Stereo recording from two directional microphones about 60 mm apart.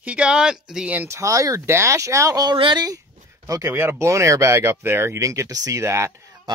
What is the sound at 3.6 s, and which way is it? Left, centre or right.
Speech, right.